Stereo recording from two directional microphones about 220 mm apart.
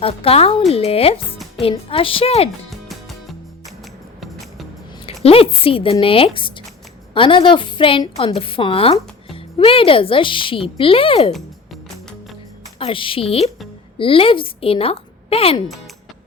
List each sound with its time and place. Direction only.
0.0 s a woman's voice: 25° left (ahead or behind)
2.6 s music: centre (ahead or behind)
5.0 s a woman's voice: 25° left (ahead or behind)
12.8 s a woman's voice: 25° left (ahead or behind)